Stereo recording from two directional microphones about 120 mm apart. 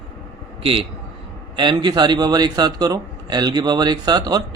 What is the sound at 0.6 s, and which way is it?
Speech, 50° right (ahead or behind).